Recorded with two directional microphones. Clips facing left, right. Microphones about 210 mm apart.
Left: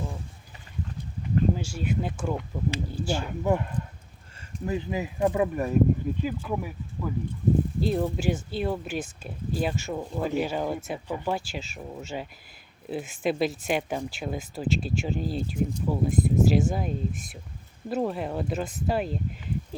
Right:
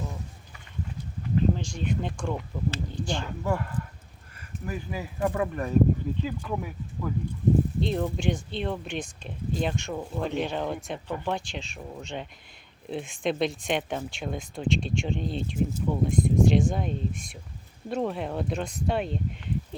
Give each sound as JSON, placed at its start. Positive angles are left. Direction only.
{"t": 1.5, "sound": "speech", "side_deg": 5}
{"t": 3.4, "sound": "speech", "side_deg": 20}